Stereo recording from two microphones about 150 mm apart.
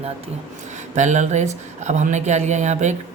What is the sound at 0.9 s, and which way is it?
Speech, 55° right (ahead or behind).